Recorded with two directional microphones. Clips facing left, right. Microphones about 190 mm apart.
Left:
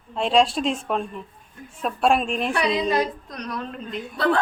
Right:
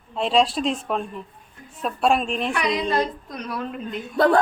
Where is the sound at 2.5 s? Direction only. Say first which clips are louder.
Left 2 dB; 30° left (ahead or behind).